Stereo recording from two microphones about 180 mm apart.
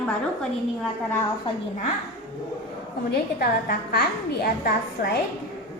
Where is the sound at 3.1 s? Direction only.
60° left (ahead or behind).